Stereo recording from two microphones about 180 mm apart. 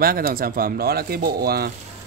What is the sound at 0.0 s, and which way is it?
Speech, 55° right (ahead or behind).